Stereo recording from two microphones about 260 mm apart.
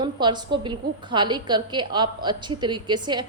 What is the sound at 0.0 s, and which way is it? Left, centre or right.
A woman's voice, centre.